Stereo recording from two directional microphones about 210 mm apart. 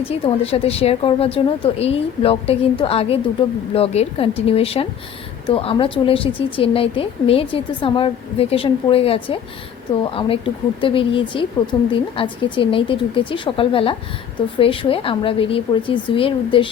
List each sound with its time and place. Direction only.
0.0 s speech: 30° left (ahead or behind)